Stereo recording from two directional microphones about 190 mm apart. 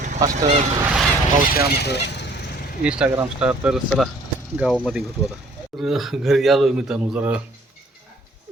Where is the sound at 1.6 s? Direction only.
60° left (ahead or behind).